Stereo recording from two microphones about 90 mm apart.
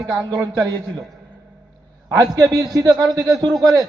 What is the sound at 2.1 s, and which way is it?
A man's voice, 45° right (ahead or behind).